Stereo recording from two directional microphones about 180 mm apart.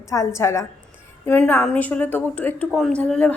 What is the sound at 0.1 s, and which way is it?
A woman's voice, 15° left (ahead or behind).